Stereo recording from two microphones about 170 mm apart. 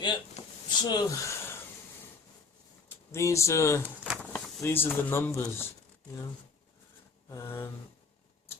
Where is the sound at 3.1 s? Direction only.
15° left (ahead or behind).